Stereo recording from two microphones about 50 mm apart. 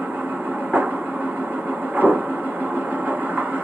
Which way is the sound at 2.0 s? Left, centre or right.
Right.